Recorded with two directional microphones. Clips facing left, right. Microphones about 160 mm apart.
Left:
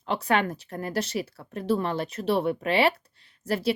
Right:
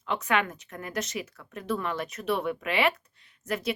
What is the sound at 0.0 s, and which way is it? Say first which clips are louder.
Speech: left 3 dB; 35° left (ahead or behind).